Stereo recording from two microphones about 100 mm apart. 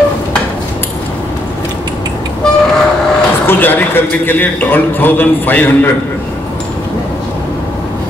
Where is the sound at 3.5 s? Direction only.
20° left (ahead or behind).